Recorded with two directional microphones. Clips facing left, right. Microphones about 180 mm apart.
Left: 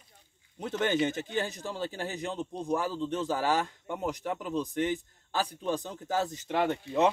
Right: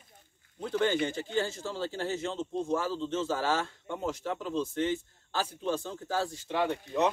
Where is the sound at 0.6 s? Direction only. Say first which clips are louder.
Even; 20° left (ahead or behind).